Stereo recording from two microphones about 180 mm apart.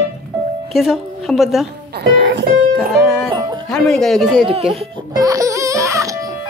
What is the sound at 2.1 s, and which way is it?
Speech, 70° right (ahead or behind).